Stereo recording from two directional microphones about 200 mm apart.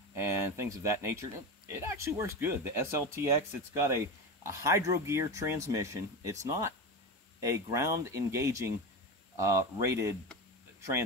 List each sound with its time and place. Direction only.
0.2 s speech: 15° right (ahead or behind)